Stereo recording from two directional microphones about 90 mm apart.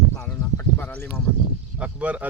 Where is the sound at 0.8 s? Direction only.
20° left (ahead or behind).